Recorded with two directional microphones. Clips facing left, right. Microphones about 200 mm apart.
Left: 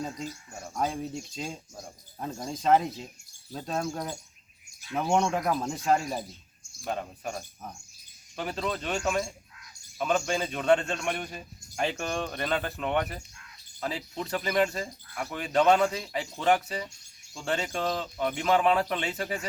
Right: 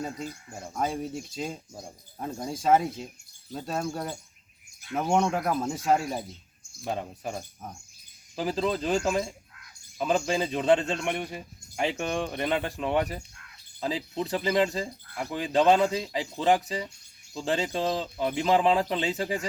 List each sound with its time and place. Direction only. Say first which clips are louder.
0.7 s a man's voice: right 1 dB; 5° right (ahead or behind)
8.4 s a man's voice: right 5 dB; 30° right (ahead or behind)
15.2 s speech: right 3 dB; 15° right (ahead or behind)
15.5 s a man's voice: right 1 dB; 30° right (ahead or behind)